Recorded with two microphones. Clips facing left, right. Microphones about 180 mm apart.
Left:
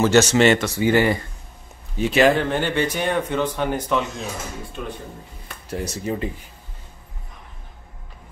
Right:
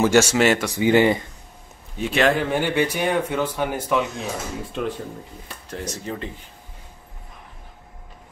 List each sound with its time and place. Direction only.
0.0 s speech: 10° right (ahead or behind)
0.7 s speech: 15° right (ahead or behind)
2.0 s speech: centre (ahead or behind)
2.5 s speech: 10° right (ahead or behind)
5.7 s speech: 10° left (ahead or behind)